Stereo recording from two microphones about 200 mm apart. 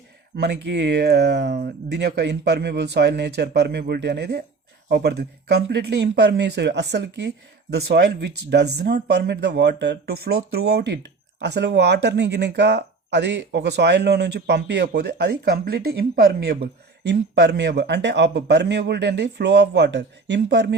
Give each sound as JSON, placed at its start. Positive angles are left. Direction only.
{"t": 0.3, "sound": "speech", "side_deg": -55}